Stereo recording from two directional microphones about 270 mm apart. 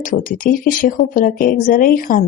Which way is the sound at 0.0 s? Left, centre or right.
Left.